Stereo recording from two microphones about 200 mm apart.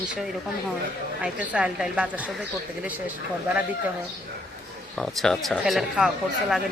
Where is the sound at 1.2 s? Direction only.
5° right (ahead or behind).